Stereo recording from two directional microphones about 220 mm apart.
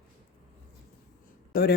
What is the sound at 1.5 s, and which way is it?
Speech, 45° left (ahead or behind).